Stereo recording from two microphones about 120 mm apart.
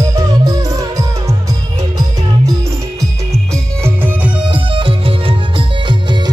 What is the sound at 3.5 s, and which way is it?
Music, 20° right (ahead or behind).